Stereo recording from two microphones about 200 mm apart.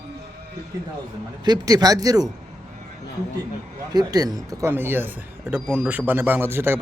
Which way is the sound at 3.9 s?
20° right (ahead or behind).